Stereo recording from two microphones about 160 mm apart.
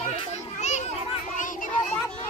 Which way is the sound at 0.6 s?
45° left (ahead or behind).